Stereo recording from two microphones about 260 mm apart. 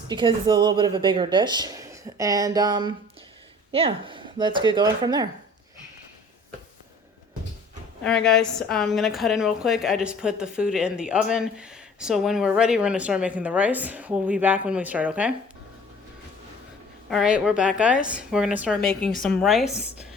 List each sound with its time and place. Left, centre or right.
0.1 s speech: centre
8.0 s a woman's voice: centre
17.1 s a woman's voice: centre